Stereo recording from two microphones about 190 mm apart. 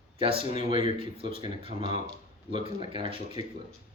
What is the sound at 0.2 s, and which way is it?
Speech, 30° right (ahead or behind).